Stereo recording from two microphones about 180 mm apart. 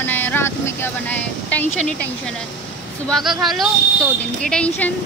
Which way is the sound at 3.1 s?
Centre (ahead or behind).